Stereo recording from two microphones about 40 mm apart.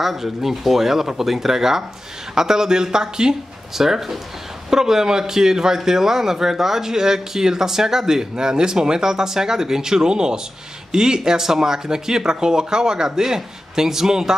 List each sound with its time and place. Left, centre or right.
0.0 s speech: centre